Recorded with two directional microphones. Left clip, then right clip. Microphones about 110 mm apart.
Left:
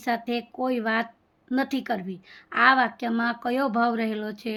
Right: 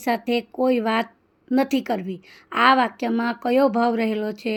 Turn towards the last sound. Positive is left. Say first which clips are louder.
# right 5 dB
turn(degrees=-30)  # may be behind; listen again after turning